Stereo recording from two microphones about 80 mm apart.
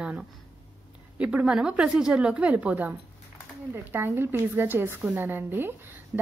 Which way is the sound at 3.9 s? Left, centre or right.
Right.